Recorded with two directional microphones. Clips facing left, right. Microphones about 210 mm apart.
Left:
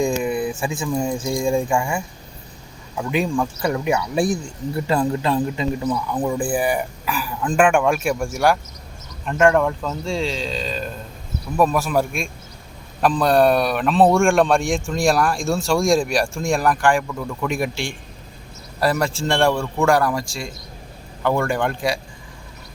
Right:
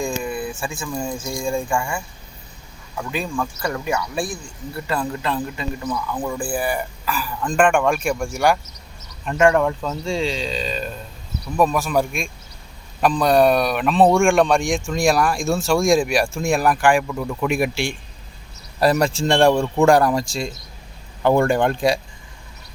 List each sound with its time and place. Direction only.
0.0 s a sound: 20° left (ahead or behind)
0.6 s speech: 20° left (ahead or behind)
3.0 s a man's voice: 15° left (ahead or behind); by 21.9 s 25° right (ahead or behind)